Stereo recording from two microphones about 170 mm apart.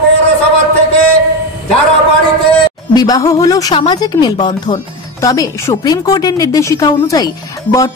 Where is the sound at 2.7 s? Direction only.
20° left (ahead or behind).